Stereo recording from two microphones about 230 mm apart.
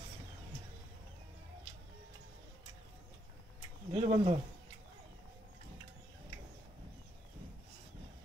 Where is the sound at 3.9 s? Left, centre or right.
Right.